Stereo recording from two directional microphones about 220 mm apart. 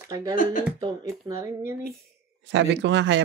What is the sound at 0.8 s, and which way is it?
Speech, 15° right (ahead or behind).